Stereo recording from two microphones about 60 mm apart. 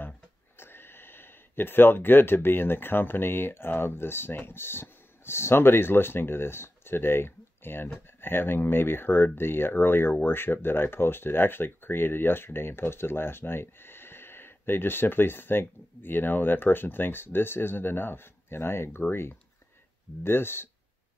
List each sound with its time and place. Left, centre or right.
0.6 s speech: left